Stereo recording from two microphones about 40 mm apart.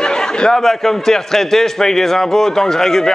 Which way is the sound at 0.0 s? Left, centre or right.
Centre.